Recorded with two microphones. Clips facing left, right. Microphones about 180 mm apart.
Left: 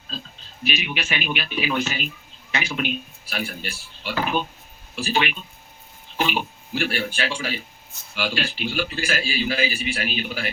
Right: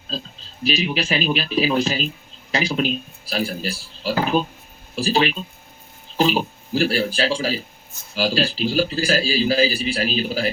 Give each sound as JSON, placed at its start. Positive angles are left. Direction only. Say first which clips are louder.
{"t": 0.1, "sound": "a man's voice", "louder": "right 6 dB", "side_deg": -35}